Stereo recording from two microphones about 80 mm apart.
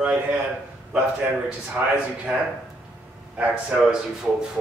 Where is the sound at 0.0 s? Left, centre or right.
Centre.